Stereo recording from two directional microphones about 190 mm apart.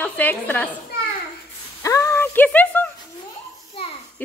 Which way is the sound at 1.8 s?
15° left (ahead or behind).